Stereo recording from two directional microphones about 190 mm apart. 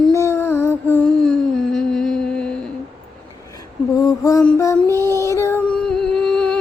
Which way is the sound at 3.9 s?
20° left (ahead or behind).